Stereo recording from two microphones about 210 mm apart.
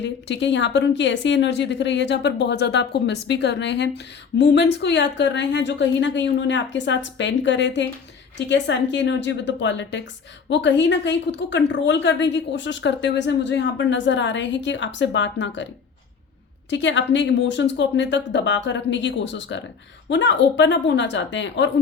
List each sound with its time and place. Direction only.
0.0 s a woman's voice: 55° left (ahead or behind)